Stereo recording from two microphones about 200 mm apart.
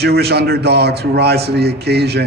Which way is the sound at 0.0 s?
55° right (ahead or behind).